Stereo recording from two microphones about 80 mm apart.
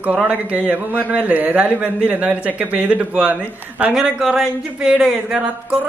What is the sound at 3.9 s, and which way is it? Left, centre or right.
A man's voice, centre.